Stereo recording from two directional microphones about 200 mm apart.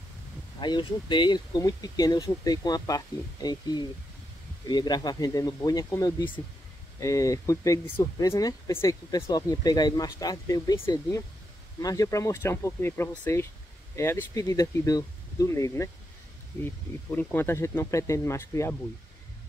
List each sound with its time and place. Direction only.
0.6 s speech: 20° left (ahead or behind)